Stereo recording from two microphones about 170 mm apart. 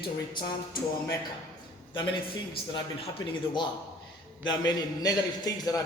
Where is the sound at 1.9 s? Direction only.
30° left (ahead or behind).